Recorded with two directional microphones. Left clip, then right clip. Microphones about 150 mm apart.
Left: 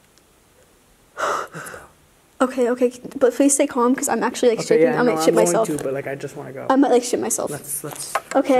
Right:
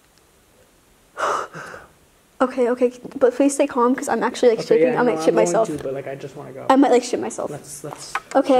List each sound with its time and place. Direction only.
1.1 s gasp: centre (ahead or behind)
2.3 s speech: 5° left (ahead or behind)
5.7 s speech: 25° left (ahead or behind)
6.7 s speech: 5° right (ahead or behind)
7.2 s speech: 15° left (ahead or behind)
8.1 s speech: centre (ahead or behind)